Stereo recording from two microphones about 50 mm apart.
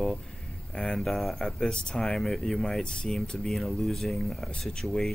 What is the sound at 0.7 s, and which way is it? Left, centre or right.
Speech, centre.